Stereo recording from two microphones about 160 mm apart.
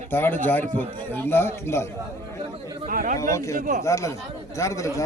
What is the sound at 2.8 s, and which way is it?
Speech, 55° right (ahead or behind).